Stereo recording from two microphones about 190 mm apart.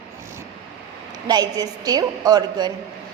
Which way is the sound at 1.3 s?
20° right (ahead or behind).